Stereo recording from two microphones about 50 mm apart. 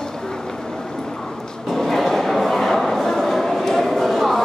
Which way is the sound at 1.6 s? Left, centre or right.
Centre.